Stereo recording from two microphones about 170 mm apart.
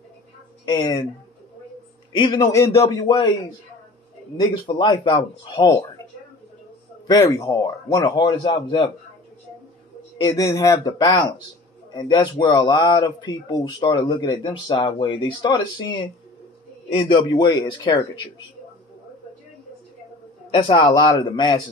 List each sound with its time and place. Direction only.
0.7 s speech: 25° left (ahead or behind)
2.1 s speech: 25° left (ahead or behind)
7.1 s speech: 20° left (ahead or behind)
10.1 s speech: 20° left (ahead or behind)
20.5 s speech: 30° left (ahead or behind)